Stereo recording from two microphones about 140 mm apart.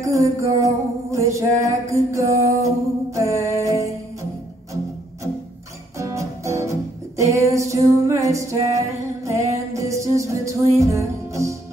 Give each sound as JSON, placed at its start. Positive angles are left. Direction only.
{"t": 0.0, "sound": "music", "side_deg": -20}
{"t": 5.9, "sound": "music", "side_deg": -20}